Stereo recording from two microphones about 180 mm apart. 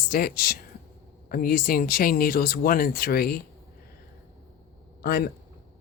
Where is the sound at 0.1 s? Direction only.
55° left (ahead or behind).